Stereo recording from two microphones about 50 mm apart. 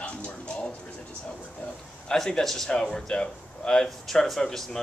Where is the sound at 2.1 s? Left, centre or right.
Centre.